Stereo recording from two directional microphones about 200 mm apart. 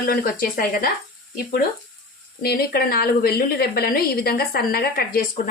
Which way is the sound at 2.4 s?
50° left (ahead or behind).